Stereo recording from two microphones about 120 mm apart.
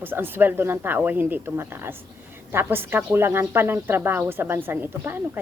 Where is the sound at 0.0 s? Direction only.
15° right (ahead or behind).